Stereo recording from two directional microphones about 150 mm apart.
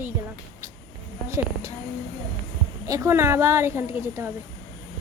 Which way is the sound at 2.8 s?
20° right (ahead or behind).